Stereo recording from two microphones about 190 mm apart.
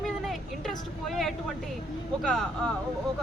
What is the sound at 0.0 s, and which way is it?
Vehicle, centre (ahead or behind).